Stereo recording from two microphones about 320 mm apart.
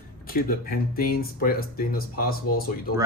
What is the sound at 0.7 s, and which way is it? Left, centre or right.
Speech, left.